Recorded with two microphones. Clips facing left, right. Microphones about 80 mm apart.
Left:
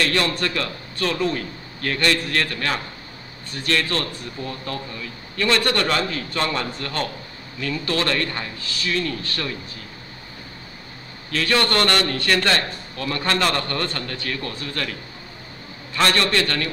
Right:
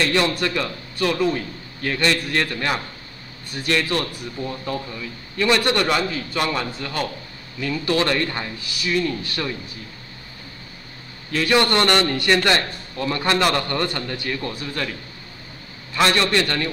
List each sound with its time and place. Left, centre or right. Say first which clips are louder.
0.0 s a man's voice: right 2 dB; centre
11.3 s a man's voice: right 2 dB; centre
16.0 s a man's voice: right 1 dB; centre